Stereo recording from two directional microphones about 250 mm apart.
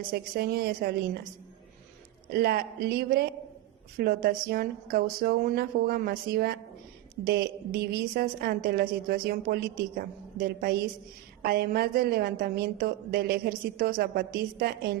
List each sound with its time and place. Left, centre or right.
0.1 s a woman's voice: right
2.3 s a woman's voice: right